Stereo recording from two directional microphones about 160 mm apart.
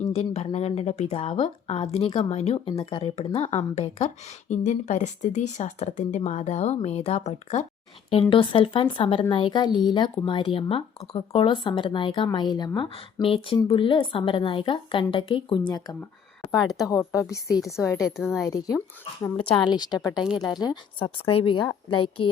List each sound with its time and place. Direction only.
0.3 s speech: 40° left (ahead or behind)
8.1 s speech: 35° left (ahead or behind)
16.4 s a woman's voice: 10° left (ahead or behind)
16.9 s a woman's voice: 20° left (ahead or behind)
18.0 s speech: centre (ahead or behind)
18.4 s a woman's voice: 20° left (ahead or behind)